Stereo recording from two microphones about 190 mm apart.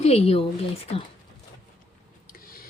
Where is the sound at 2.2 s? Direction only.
50° left (ahead or behind).